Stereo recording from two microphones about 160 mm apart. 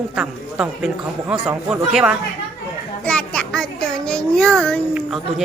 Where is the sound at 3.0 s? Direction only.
5° left (ahead or behind).